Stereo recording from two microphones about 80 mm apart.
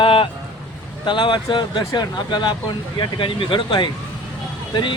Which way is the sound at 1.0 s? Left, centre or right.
Left.